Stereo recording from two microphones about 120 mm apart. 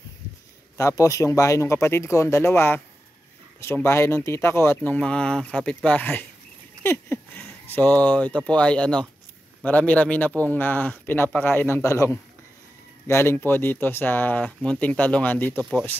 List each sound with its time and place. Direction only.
0.7 s speech: 25° left (ahead or behind)
6.8 s a sound: 20° left (ahead or behind)
7.6 s speech: 15° left (ahead or behind)